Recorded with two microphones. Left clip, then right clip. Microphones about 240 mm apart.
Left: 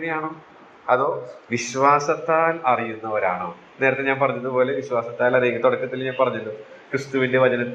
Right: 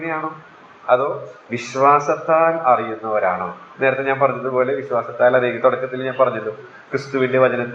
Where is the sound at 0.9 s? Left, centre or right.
Left.